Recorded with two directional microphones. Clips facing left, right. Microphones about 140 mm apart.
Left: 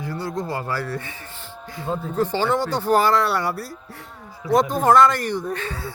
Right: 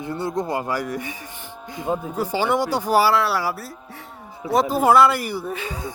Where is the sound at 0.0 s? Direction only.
20° right (ahead or behind); by 3.7 s centre (ahead or behind).